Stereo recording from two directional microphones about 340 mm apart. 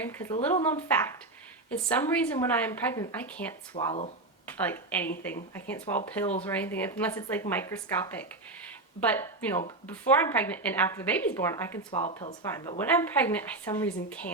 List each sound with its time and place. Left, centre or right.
0.0 s a woman's voice: centre
4.4 s a woman's voice: centre
11.9 s a woman's voice: centre